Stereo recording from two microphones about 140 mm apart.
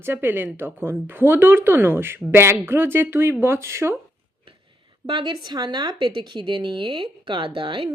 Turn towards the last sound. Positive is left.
turn(degrees=-35)  # may be behind; listen again after turning